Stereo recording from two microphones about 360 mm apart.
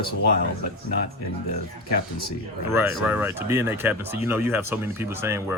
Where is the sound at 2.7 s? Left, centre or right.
Centre.